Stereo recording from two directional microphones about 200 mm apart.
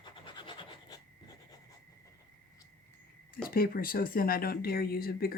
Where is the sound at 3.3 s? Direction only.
45° left (ahead or behind).